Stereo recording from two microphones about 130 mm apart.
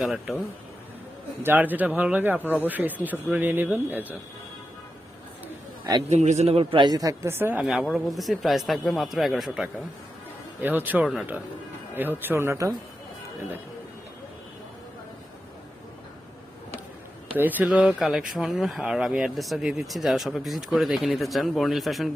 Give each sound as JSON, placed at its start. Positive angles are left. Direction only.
{"t": 0.0, "sound": "speech", "side_deg": 0}
{"t": 1.4, "sound": "speech", "side_deg": -15}
{"t": 6.1, "sound": "speech", "side_deg": -60}
{"t": 7.6, "sound": "speech", "side_deg": -5}
{"t": 10.6, "sound": "speech", "side_deg": -15}
{"t": 17.3, "sound": "speech", "side_deg": -15}